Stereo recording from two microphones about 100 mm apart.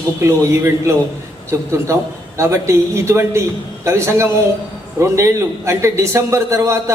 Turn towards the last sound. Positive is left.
turn(degrees=-30)  # may be behind; listen again after turning